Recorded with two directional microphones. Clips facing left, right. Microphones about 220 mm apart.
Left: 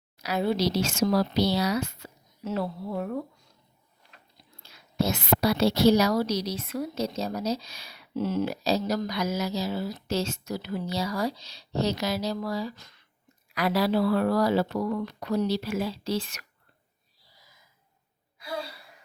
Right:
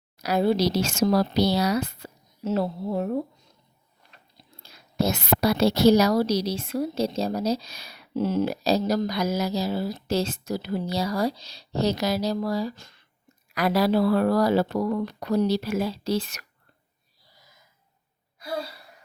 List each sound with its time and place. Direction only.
0.2 s speech: 40° right (ahead or behind)
4.6 s speech: 40° right (ahead or behind)
8.1 s speech: 30° right (ahead or behind)
13.5 s speech: 45° right (ahead or behind)